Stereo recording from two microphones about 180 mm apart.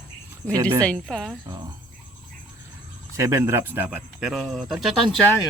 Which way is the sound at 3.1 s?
15° right (ahead or behind).